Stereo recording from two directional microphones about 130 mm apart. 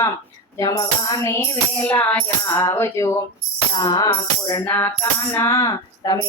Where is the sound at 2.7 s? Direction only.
20° left (ahead or behind).